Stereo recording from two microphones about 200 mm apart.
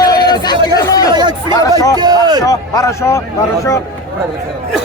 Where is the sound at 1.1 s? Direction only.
20° right (ahead or behind).